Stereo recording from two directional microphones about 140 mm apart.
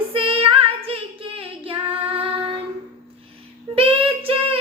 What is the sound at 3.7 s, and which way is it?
Child singing, 40° right (ahead or behind).